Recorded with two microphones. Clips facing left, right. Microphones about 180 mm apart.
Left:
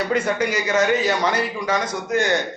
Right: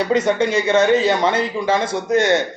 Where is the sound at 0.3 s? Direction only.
25° right (ahead or behind).